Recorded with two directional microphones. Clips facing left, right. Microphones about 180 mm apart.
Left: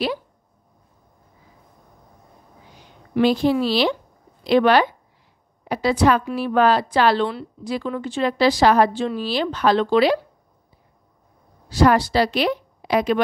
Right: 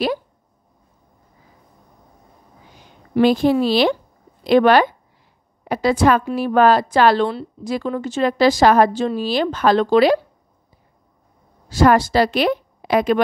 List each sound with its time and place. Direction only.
3.2 s a woman's voice: 50° right (ahead or behind)
11.7 s a woman's voice: 50° right (ahead or behind)